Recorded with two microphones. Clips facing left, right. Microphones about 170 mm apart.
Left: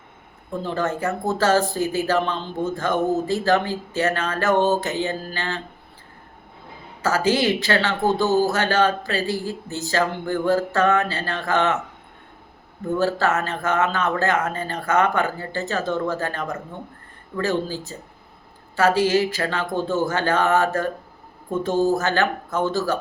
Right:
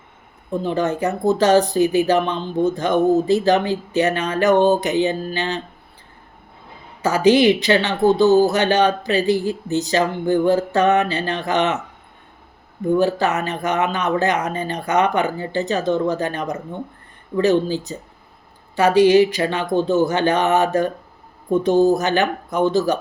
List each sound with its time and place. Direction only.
0.6 s speech: 15° right (ahead or behind)
7.0 s speech: 20° right (ahead or behind)
12.8 s speech: 15° right (ahead or behind)